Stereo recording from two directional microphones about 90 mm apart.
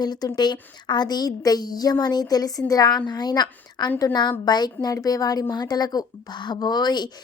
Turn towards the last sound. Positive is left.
turn(degrees=50)  # may be behind; listen again after turning